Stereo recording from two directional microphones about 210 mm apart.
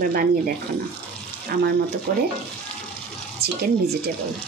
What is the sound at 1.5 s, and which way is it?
Speech, 45° right (ahead or behind).